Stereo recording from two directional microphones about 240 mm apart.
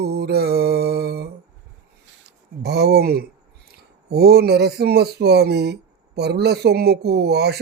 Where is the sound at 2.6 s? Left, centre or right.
Right.